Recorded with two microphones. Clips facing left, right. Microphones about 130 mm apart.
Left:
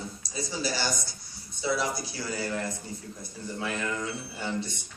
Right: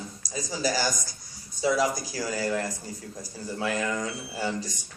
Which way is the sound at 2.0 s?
90° right.